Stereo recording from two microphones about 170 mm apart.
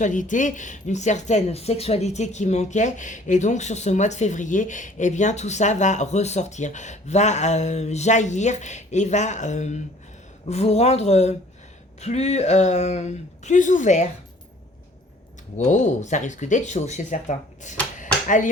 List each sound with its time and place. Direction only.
0.0 s speech: 50° left (ahead or behind)
15.5 s speech: 45° left (ahead or behind)
17.9 s a sound: 50° left (ahead or behind)